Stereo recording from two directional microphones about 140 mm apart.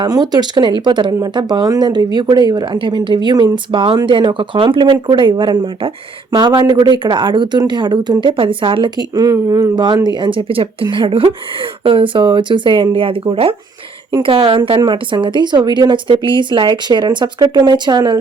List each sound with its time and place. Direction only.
0.0 s speech: 30° right (ahead or behind)